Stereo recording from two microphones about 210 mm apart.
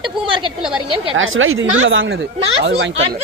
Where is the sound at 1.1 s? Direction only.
70° right (ahead or behind); by 2.9 s 55° right (ahead or behind).